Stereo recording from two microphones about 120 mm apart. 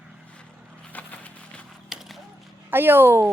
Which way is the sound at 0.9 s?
15° left (ahead or behind).